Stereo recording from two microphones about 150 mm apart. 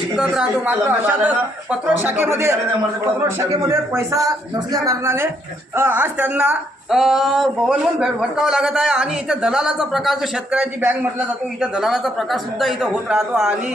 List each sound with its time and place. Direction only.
0.2 s a man's voice: 5° right (ahead or behind)